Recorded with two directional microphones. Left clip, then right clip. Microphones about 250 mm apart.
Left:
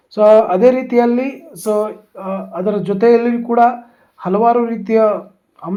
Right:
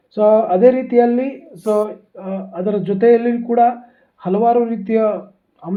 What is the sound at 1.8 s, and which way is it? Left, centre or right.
Speech, left.